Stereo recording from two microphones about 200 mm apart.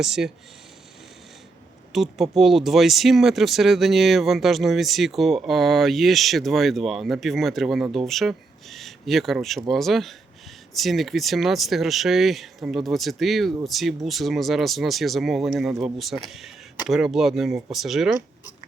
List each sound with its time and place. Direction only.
0.0 s speech: centre (ahead or behind)
1.9 s speech: centre (ahead or behind)